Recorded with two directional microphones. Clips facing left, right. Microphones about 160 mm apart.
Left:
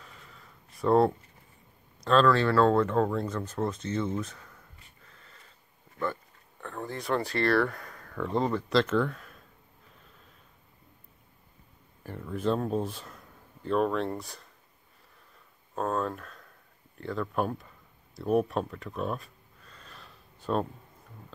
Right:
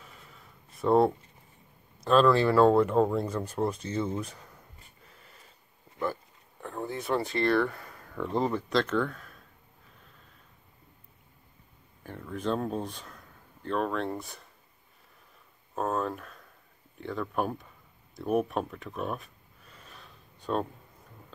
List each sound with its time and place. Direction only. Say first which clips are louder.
0.7 s speech: even; centre (ahead or behind)
5.0 s a sound: even; 10° right (ahead or behind)
6.6 s speech: right 2 dB; 10° right (ahead or behind)
8.0 s a sound: even; 20° right (ahead or behind)
8.3 s speech: left 1 dB; 5° right (ahead or behind)
12.0 s speech: left 3 dB; 5° left (ahead or behind)
15.7 s speech: even; 5° right (ahead or behind)
18.1 s gasp: left 1 dB; centre (ahead or behind)